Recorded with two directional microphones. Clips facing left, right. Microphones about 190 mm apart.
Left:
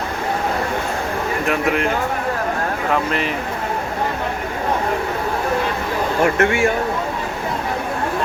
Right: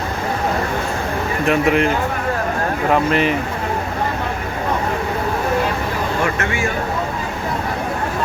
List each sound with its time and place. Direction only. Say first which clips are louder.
1.5 s speech: right 5 dB; centre (ahead or behind)
2.9 s speech: right 5 dB; centre (ahead or behind)
6.2 s a man's voice: left 5 dB; 55° left (ahead or behind)